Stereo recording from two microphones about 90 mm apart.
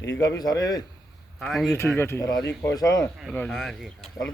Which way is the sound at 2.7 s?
40° left (ahead or behind).